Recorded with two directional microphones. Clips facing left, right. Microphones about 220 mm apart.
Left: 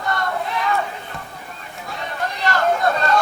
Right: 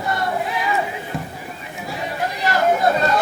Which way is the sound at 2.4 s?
10° right (ahead or behind).